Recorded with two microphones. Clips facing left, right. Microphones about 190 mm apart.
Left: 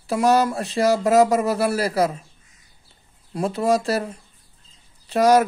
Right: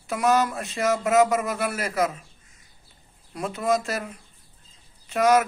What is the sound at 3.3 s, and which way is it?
Speech, 35° left (ahead or behind).